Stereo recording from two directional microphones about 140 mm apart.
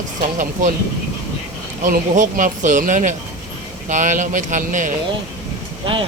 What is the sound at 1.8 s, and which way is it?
Speech, 65° right (ahead or behind).